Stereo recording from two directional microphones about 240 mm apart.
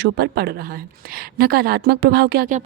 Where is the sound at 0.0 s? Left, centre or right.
Right.